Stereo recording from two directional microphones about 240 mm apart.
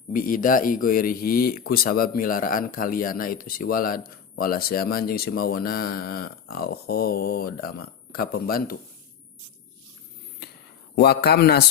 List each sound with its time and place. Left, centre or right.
0.1 s speech: left
10.9 s speech: left